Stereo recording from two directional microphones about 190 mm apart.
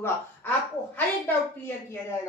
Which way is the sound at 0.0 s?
10° left (ahead or behind).